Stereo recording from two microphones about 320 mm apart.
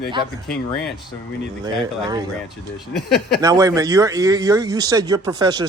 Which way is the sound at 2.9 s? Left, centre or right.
Left.